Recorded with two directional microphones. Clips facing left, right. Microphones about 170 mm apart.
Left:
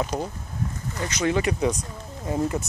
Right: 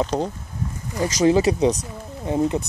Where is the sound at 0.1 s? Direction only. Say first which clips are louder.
Right 5 dB; 35° right (ahead or behind).